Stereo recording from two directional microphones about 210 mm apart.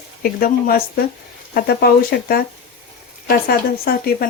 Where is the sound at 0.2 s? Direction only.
45° left (ahead or behind).